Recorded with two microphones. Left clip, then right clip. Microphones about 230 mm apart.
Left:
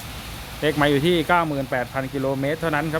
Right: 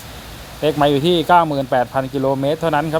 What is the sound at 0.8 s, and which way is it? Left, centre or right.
Speech, centre.